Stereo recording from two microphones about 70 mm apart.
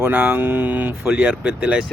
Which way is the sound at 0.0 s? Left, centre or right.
Right.